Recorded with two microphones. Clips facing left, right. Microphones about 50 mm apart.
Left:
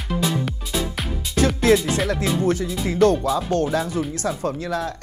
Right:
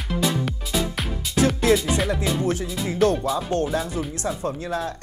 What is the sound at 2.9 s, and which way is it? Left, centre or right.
Speech, left.